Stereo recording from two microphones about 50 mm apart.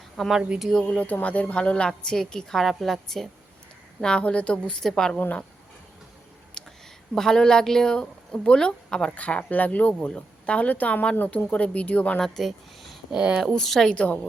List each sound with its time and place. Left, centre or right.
0.2 s a woman's voice: centre
0.7 s a woman's voice: centre
1.0 s a woman's voice: left; by 3.2 s centre
4.0 s a woman's voice: centre
6.6 s a sound: centre
7.1 s speech: centre
9.1 s a woman's voice: left
12.2 s speech: centre
13.1 s speech: centre
13.5 s speech: centre
13.9 s a woman's voice: left